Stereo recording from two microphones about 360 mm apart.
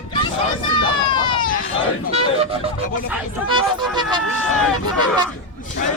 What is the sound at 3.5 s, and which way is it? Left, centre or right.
Vehicle, centre.